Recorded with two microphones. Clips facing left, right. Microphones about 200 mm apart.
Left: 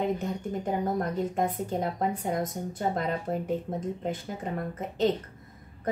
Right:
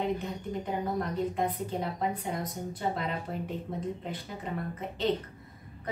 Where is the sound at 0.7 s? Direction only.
45° left (ahead or behind).